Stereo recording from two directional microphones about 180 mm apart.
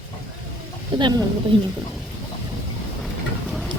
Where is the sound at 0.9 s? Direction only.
25° right (ahead or behind).